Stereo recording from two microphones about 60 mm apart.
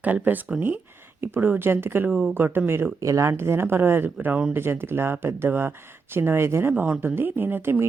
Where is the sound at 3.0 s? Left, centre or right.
Right.